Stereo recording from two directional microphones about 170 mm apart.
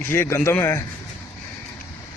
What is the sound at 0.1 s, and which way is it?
Speech, 15° left (ahead or behind).